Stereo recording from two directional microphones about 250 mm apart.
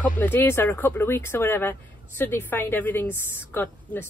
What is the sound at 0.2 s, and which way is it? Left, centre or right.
Speech, centre.